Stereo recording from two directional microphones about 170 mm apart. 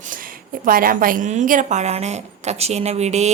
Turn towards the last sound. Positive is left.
turn(degrees=-40)  # may be behind; listen again after turning